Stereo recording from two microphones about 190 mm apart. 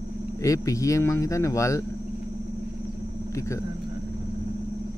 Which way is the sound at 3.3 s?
15° left (ahead or behind).